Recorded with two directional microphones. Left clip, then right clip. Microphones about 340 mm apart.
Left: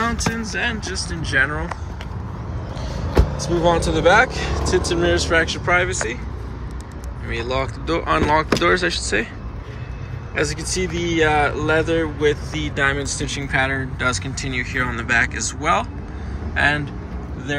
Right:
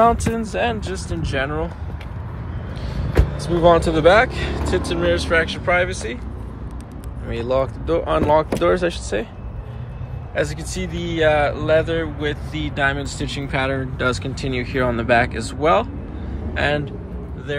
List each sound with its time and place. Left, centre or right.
0.5 s speech: right
1.1 s speech: centre
3.3 s speech: centre
7.2 s speech: centre
10.3 s speech: centre